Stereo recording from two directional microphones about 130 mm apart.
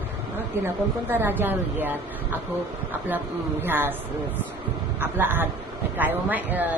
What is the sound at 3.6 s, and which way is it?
Speech, 15° right (ahead or behind).